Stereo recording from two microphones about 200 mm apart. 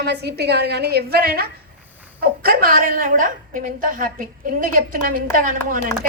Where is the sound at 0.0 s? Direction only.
55° right (ahead or behind).